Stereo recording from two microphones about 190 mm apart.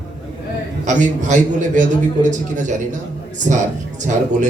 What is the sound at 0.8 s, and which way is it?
A man's voice, 40° right (ahead or behind).